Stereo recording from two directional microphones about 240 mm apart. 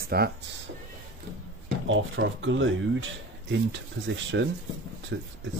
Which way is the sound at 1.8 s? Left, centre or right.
Right.